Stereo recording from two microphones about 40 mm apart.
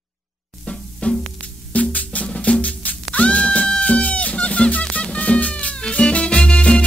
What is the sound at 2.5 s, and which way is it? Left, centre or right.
Music, left.